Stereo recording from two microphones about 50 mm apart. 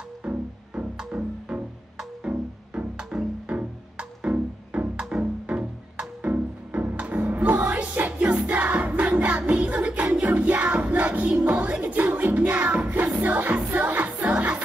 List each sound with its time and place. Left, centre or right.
0.2 s music: right
14.3 s music: right